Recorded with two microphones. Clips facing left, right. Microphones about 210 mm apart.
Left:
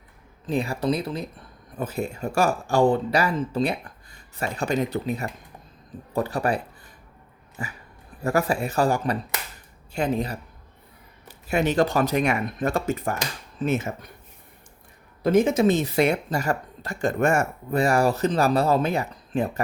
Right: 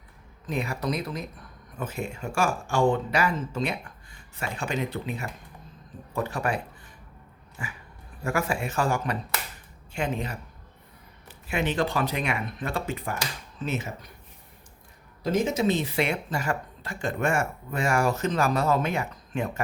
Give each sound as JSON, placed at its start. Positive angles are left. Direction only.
{"t": 0.4, "sound": "speech", "side_deg": 30}
{"t": 7.6, "sound": "speech", "side_deg": 40}
{"t": 15.2, "sound": "speech", "side_deg": 55}